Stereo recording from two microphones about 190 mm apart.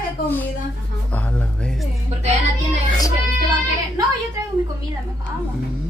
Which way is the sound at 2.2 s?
35° right (ahead or behind).